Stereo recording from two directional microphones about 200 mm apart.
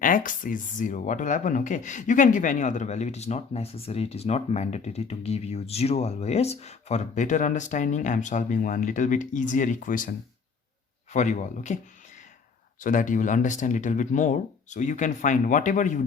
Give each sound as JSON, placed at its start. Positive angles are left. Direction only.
{"t": 0.0, "sound": "speech", "side_deg": 40}
{"t": 12.8, "sound": "speech", "side_deg": 40}